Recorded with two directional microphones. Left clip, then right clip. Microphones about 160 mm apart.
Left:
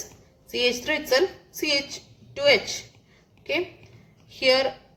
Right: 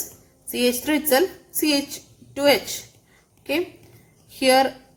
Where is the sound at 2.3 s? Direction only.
55° right (ahead or behind).